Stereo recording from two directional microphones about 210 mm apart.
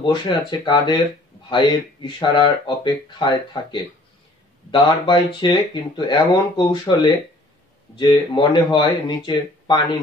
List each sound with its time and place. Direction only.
0.0 s speech: 20° left (ahead or behind)
4.6 s speech: 20° left (ahead or behind)